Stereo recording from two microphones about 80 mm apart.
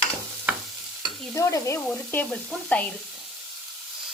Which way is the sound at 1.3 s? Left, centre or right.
Left.